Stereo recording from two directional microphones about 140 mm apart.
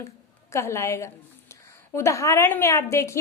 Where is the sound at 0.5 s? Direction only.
20° left (ahead or behind).